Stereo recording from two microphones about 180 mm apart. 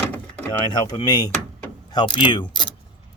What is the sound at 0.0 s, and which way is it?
Vehicle, 10° left (ahead or behind).